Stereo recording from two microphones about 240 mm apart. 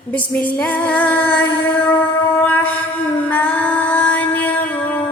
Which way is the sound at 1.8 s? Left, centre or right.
Centre.